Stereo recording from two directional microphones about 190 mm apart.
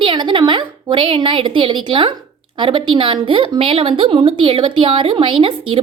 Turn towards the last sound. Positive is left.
turn(degrees=-30)  # may be behind; listen again after turning